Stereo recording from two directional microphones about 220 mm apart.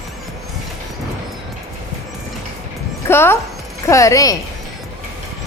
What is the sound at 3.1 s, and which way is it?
A woman's voice, 10° left (ahead or behind).